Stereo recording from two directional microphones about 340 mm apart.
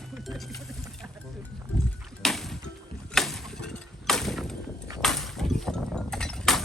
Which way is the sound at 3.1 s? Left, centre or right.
Centre.